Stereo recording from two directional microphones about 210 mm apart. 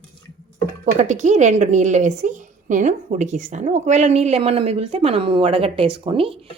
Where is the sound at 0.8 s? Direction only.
35° right (ahead or behind).